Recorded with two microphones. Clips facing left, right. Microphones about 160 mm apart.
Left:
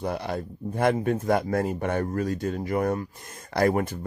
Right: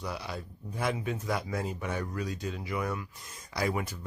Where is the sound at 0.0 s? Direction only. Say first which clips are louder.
Left 8 dB; 55° left (ahead or behind).